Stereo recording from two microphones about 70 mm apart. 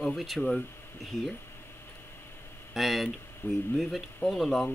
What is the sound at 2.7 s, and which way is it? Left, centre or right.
Speech, centre.